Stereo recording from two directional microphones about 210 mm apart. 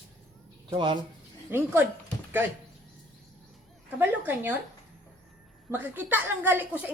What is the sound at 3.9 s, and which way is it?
Speech, 10° right (ahead or behind).